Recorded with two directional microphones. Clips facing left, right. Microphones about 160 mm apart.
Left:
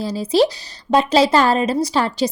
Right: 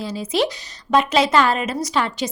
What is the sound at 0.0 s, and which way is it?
Speech, 35° left (ahead or behind).